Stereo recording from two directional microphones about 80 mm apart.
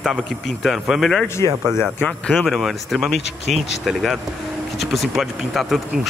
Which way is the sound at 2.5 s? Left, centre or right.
Centre.